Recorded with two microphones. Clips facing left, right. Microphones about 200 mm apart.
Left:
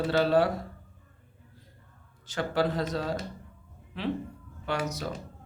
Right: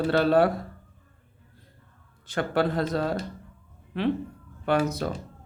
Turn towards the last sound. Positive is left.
turn(degrees=-55)  # may be behind; listen again after turning